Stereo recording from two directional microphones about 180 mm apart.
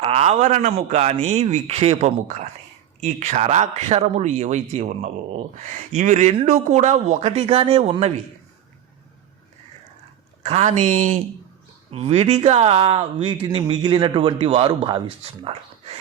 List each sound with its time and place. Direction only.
0.0 s speech: 35° right (ahead or behind)
10.4 s speech: 35° right (ahead or behind)